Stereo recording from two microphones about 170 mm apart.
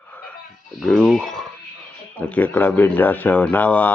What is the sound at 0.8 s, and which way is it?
Speech, centre (ahead or behind).